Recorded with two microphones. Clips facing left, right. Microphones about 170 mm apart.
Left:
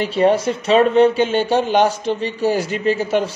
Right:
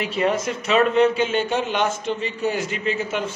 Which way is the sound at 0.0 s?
30° left (ahead or behind).